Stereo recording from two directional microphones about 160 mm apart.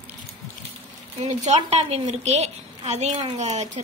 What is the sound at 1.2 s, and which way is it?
A woman's voice, 45° right (ahead or behind).